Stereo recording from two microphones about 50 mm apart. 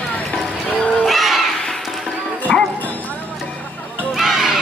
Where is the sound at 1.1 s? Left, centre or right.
Centre.